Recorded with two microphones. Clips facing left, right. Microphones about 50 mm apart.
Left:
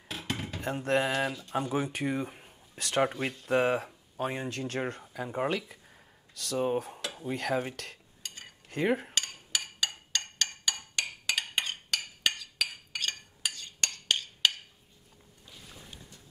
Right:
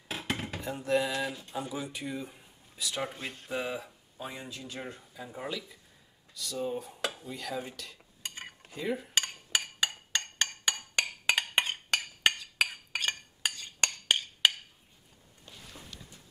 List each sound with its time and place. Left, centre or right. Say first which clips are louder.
0.6 s dishes: left 2 dB; left
1.7 s speech: left 6 dB; left
5.1 s dishes: left 7 dB; left
8.2 s cutlery: right 5 dB; right
8.6 s cutlery: left 6 dB; left
9.1 s a sound: right 3 dB; right
14.4 s wood block: right 1 dB; centre